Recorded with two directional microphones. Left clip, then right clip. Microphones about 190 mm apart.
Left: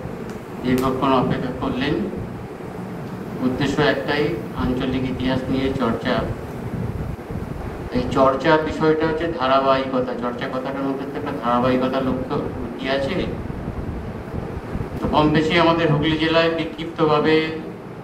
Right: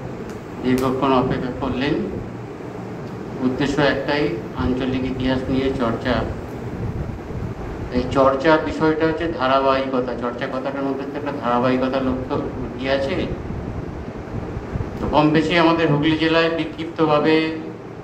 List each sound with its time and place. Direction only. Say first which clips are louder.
0.7 s speech: even; 65° left (ahead or behind)
3.5 s speech: even; 65° left (ahead or behind)
7.9 s speech: right 1 dB; 65° left (ahead or behind)
15.1 s speech: right 1 dB; 70° left (ahead or behind)